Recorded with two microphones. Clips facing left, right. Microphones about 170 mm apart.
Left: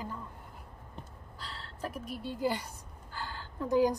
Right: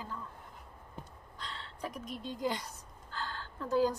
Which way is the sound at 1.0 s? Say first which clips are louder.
Right 1 dB; 5° left (ahead or behind).